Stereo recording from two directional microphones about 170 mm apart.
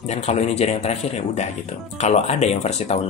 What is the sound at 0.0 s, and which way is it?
Speech, 40° left (ahead or behind).